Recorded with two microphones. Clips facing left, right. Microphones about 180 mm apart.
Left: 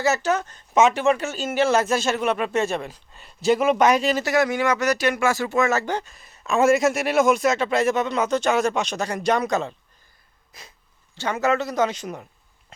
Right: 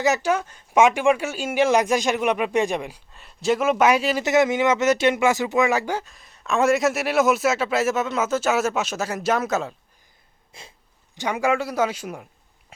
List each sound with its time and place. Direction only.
0.0 s speech: 15° right (ahead or behind)
3.1 s speech: centre (ahead or behind)
4.2 s speech: 20° right (ahead or behind); by 9.7 s 5° right (ahead or behind)
10.5 s wheeze: 25° right (ahead or behind)
11.1 s speech: 15° right (ahead or behind)